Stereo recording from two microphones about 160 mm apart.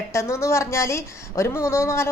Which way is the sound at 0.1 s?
15° left (ahead or behind).